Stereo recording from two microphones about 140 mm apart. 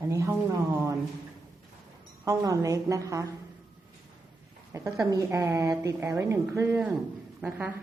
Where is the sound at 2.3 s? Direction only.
25° right (ahead or behind).